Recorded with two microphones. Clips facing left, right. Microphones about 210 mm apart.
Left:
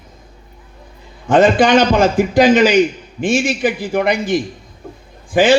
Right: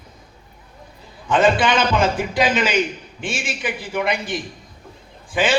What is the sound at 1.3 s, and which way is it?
A man's voice, 45° left (ahead or behind).